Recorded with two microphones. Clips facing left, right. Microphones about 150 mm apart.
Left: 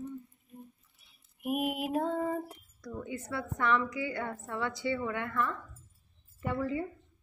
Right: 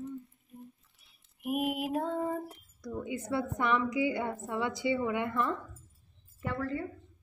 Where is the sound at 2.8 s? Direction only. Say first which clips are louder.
Right 3 dB; 15° right (ahead or behind).